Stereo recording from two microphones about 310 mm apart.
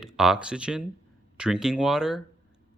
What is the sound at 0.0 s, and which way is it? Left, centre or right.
Speech, centre.